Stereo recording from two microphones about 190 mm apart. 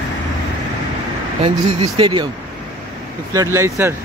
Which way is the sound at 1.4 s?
30° right (ahead or behind).